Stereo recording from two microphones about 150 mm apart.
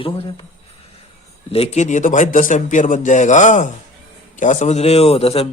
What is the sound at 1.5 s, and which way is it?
Speech, 45° left (ahead or behind).